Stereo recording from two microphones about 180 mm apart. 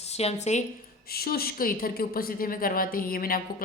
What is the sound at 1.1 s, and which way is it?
A woman's voice, 60° left (ahead or behind).